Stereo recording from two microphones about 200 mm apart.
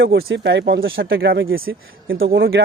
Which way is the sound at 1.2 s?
50° right (ahead or behind).